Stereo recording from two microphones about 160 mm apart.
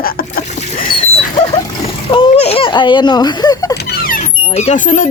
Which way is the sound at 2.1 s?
35° left (ahead or behind).